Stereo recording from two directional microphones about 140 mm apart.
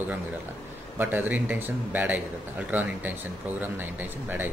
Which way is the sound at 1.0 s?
15° right (ahead or behind).